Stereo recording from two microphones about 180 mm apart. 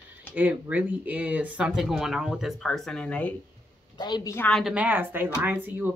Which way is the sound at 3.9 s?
25° left (ahead or behind).